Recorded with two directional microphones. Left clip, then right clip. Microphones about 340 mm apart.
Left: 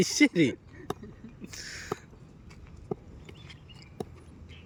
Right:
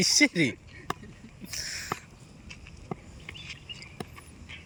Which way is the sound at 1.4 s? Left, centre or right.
Centre.